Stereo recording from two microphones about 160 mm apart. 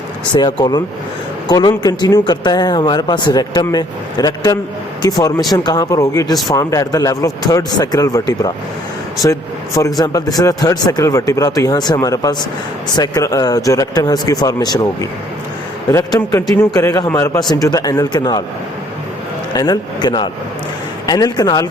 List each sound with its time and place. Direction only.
0.3 s speech: 30° left (ahead or behind)
15.9 s speech: 20° left (ahead or behind)
19.5 s speech: 25° left (ahead or behind)